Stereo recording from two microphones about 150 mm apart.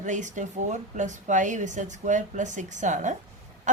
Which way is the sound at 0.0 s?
55° right (ahead or behind).